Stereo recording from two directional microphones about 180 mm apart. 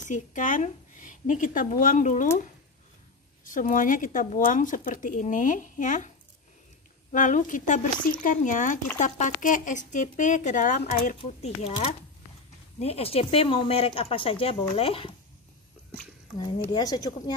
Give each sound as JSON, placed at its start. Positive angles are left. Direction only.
{"t": 0.0, "sound": "a woman's voice", "side_deg": 45}
{"t": 3.4, "sound": "speech", "side_deg": 50}